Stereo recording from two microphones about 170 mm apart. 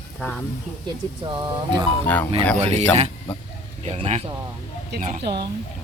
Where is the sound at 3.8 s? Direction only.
35° right (ahead or behind).